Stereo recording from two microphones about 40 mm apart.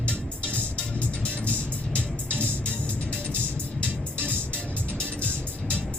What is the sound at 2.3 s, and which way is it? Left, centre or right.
Music, left.